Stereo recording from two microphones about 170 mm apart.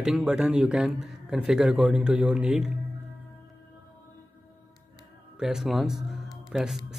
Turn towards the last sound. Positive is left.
turn(degrees=0)  # may be behind; listen again after turning